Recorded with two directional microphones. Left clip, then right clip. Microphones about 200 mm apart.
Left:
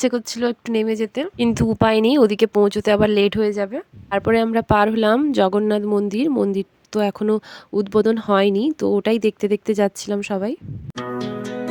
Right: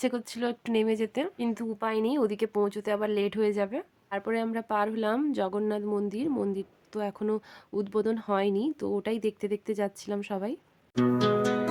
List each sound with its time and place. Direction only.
0.0 s speech: 35° left (ahead or behind)
1.4 s speech: 45° left (ahead or behind)
3.5 s a woman's voice: 30° left (ahead or behind)
4.1 s speech: 45° left (ahead or behind)
10.9 s music: centre (ahead or behind)